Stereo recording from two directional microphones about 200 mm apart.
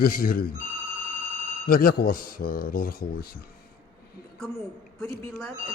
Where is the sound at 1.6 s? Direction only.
50° left (ahead or behind).